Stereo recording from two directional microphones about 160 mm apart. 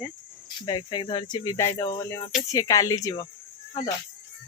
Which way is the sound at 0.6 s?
25° left (ahead or behind).